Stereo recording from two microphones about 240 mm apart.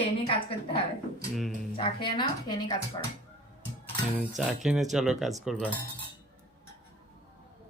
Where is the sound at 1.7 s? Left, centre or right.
Left.